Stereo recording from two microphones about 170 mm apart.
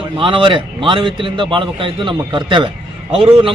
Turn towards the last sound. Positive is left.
turn(degrees=-30)  # may be behind; listen again after turning